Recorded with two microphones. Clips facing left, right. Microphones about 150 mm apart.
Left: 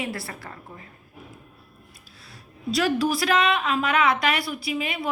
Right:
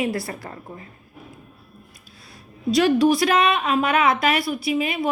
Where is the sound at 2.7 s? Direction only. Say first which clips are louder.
Right 6 dB; 20° right (ahead or behind).